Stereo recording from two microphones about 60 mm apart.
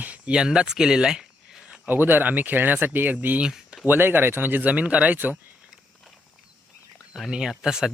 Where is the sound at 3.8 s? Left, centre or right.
Right.